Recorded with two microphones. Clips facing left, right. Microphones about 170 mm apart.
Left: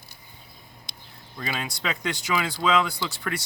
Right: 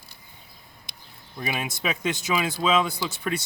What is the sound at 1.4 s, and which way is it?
Speech, 15° right (ahead or behind).